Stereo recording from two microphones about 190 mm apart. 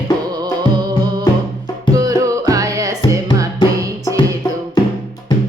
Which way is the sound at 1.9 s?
20° right (ahead or behind).